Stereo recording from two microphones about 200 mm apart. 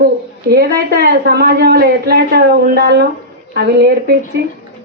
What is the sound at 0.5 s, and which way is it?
A woman's voice, 50° right (ahead or behind).